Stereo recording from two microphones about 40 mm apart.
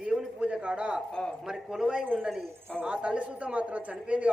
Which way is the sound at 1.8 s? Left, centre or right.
Centre.